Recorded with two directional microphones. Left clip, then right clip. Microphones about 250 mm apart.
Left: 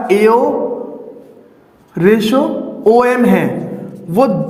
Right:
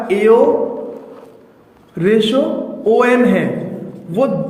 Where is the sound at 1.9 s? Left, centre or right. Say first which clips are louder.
Left 2 dB; left.